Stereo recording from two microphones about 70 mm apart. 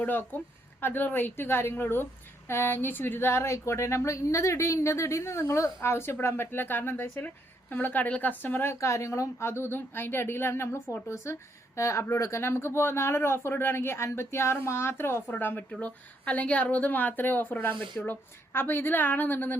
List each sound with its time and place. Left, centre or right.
0.0 s a woman's voice: left
9.5 s a woman's voice: left